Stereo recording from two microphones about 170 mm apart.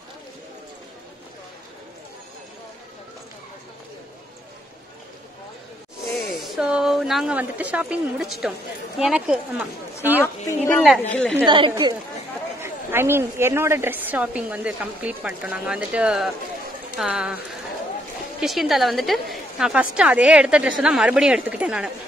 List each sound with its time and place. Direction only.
6.1 s speech: centre (ahead or behind)
10.2 s a man's voice: 15° left (ahead or behind)
11.4 s speech: 25° right (ahead or behind)
12.5 s a woman's voice: 15° right (ahead or behind)
18.4 s a woman's voice: centre (ahead or behind)